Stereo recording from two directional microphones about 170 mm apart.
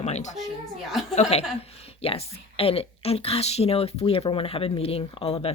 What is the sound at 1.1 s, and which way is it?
Speech, 40° left (ahead or behind).